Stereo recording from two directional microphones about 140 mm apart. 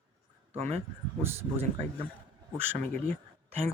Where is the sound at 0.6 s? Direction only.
45° right (ahead or behind).